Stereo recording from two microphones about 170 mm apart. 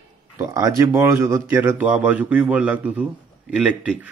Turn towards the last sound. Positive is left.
turn(degrees=-5)  # may be behind; listen again after turning